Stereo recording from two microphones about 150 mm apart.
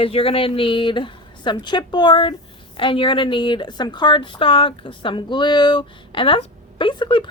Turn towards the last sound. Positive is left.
turn(degrees=35)  # may be behind; listen again after turning